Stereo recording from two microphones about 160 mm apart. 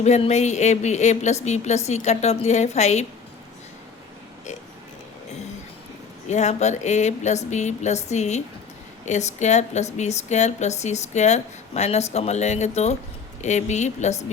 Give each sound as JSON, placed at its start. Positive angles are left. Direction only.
{"t": 0.0, "sound": "a woman's voice", "side_deg": 45}
{"t": 6.2, "sound": "a woman's voice", "side_deg": 45}